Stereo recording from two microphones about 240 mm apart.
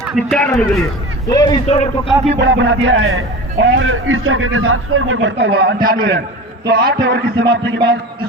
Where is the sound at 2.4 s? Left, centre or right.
Right.